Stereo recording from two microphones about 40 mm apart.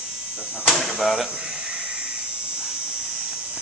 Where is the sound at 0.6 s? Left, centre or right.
Centre.